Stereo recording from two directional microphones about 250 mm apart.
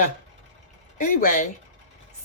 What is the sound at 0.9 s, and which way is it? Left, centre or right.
Speech, left.